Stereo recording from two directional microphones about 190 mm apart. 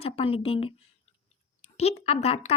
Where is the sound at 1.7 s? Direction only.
35° left (ahead or behind).